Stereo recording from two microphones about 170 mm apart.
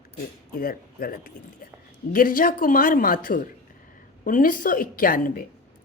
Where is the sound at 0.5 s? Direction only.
60° left (ahead or behind).